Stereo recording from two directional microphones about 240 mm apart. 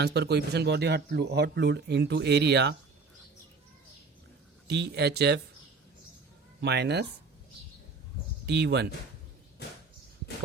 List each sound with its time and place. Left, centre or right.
0.0 s speech: right
4.7 s speech: right
6.6 s speech: right
8.4 s speech: right